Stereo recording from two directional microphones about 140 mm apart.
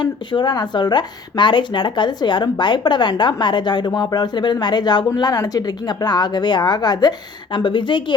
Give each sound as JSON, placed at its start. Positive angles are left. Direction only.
{"t": 0.0, "sound": "a woman's voice", "side_deg": 35}